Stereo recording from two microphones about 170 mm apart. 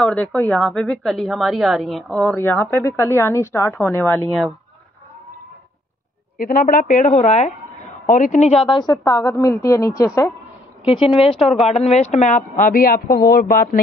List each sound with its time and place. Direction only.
0.0 s a woman's voice: 5° left (ahead or behind)
6.3 s speech: 55° left (ahead or behind)
8.6 s a woman's voice: 25° left (ahead or behind)
10.9 s speech: 35° left (ahead or behind); by 13.7 s 55° left (ahead or behind)